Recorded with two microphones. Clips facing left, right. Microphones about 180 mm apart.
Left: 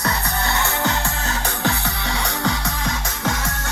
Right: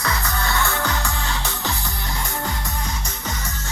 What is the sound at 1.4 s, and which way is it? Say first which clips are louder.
Music: left 5 dB; 60° left (ahead or behind).